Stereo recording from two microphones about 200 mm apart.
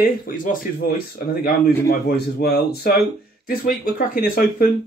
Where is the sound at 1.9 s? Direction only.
50° left (ahead or behind).